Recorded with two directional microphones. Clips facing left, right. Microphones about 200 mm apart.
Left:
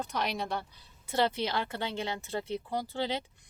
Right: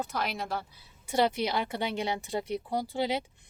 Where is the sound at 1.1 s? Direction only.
15° right (ahead or behind).